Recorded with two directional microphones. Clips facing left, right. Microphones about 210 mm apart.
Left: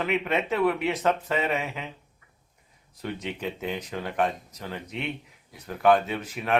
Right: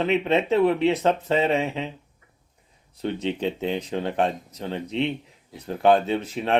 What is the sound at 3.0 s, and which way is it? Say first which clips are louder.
Speech: right 7 dB; 30° right (ahead or behind).